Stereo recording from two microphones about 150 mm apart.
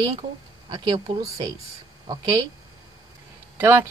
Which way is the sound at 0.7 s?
30° right (ahead or behind).